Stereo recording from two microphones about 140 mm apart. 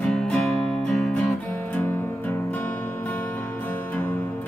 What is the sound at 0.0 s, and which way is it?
Music, 5° left (ahead or behind).